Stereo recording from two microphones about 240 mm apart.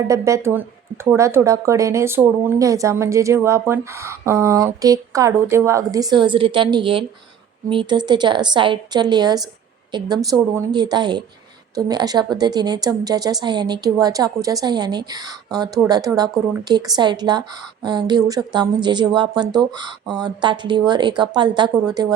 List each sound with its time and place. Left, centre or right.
0.1 s a woman's voice: centre